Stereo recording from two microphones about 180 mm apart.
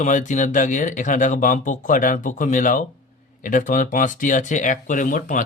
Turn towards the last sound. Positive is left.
turn(degrees=45)  # may be behind; listen again after turning